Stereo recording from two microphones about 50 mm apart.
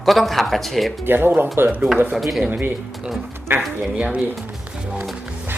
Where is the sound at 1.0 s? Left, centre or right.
Right.